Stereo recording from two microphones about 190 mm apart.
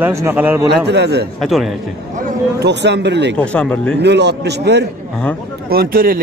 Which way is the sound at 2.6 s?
65° right (ahead or behind).